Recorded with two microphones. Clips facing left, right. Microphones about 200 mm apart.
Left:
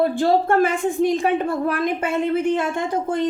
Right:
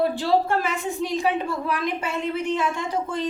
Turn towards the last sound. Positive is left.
turn(degrees=50)  # may be behind; listen again after turning